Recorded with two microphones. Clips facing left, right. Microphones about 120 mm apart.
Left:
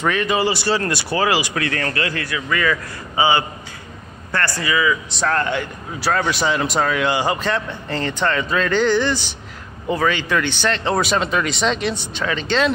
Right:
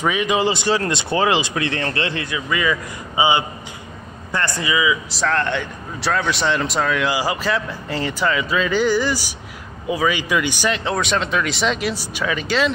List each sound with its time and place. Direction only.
0.0 s speech: 10° right (ahead or behind)
5.1 s speech: 5° left (ahead or behind)